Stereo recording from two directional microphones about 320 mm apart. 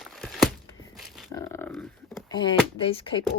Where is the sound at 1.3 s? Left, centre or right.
Centre.